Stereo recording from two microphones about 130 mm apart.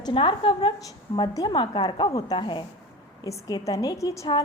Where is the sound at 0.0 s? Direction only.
40° left (ahead or behind); by 4.3 s 25° left (ahead or behind).